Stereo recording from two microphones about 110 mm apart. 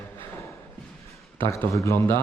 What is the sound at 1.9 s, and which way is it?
Mantra, 20° left (ahead or behind).